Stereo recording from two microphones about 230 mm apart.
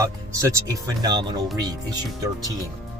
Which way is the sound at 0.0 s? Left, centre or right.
Centre.